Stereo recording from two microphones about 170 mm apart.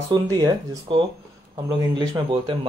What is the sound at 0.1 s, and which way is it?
Speech, 25° right (ahead or behind).